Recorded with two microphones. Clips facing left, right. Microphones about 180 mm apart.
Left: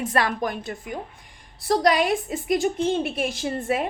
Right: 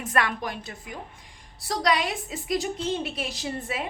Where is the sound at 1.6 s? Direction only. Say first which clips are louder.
Left 6 dB; 50° left (ahead or behind).